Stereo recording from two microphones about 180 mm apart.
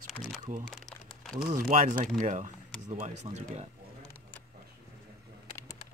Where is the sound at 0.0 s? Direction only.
Centre (ahead or behind).